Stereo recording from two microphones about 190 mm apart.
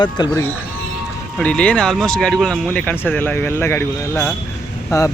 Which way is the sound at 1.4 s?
5° left (ahead or behind).